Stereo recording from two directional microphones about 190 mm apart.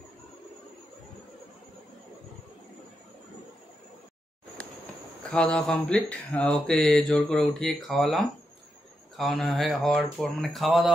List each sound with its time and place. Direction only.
5.3 s speech: 5° left (ahead or behind)